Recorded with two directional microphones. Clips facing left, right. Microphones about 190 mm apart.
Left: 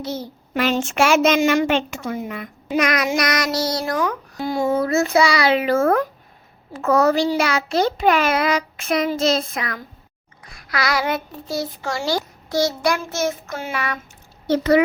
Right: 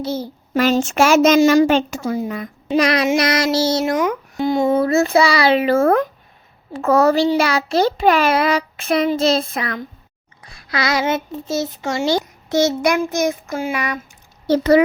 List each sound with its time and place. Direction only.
0.0 s a child's voice: 30° right (ahead or behind)
4.9 s a child's voice: 30° right (ahead or behind); by 14.0 s 10° right (ahead or behind)
14.4 s speech: 35° right (ahead or behind)